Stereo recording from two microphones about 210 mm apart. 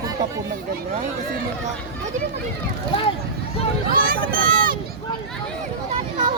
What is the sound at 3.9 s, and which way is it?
Speech, 40° right (ahead or behind).